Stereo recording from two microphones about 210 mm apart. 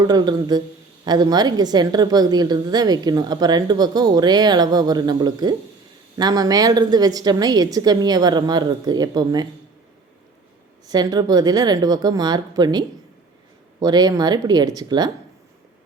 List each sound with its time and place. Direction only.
0.0 s a woman's voice: 20° right (ahead or behind)
10.8 s a woman's voice: 20° right (ahead or behind)
13.8 s a woman's voice: 20° right (ahead or behind)